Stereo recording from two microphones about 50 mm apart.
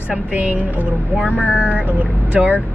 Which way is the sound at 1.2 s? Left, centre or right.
Right.